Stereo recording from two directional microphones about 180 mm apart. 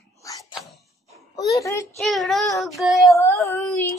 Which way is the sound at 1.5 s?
15° left (ahead or behind).